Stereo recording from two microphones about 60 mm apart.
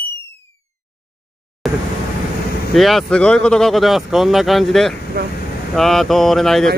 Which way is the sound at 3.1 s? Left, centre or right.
Centre.